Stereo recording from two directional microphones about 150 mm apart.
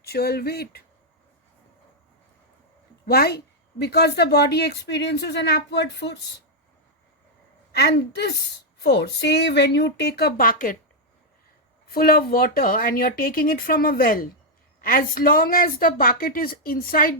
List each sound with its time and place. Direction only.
0.0 s a woman's voice: 90° left
3.1 s a woman's voice: 90° left
7.7 s a woman's voice: 90° left; by 10.8 s 70° left (ahead or behind)
11.9 s a woman's voice: 80° left